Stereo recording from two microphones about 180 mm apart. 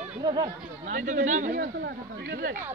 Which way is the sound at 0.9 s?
45° right (ahead or behind).